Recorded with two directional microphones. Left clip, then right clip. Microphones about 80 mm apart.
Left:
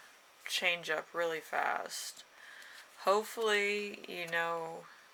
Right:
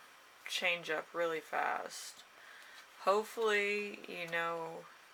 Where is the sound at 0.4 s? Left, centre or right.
Left.